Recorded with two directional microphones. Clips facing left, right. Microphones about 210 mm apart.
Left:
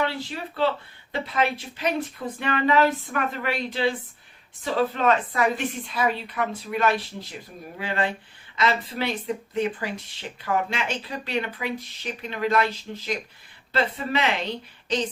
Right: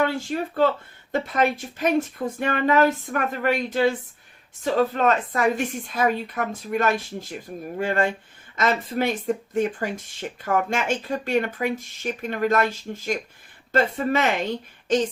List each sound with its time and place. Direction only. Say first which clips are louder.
0.0 s speech: right 4 dB; 45° right (ahead or behind)